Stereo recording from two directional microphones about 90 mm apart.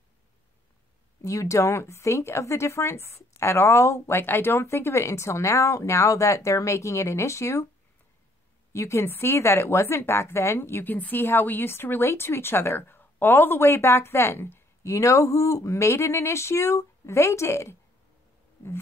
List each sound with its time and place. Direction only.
1.2 s speech: 35° left (ahead or behind)
8.7 s speech: 30° left (ahead or behind)